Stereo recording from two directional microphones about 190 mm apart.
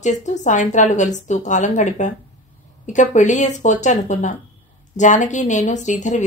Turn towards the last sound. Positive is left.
turn(degrees=40)  # may be behind; listen again after turning